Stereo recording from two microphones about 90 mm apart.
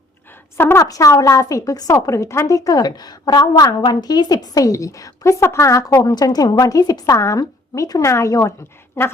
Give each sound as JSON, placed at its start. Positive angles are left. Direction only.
{"t": 0.5, "sound": "a woman's voice", "side_deg": 30}
{"t": 0.9, "sound": "a woman's voice", "side_deg": 40}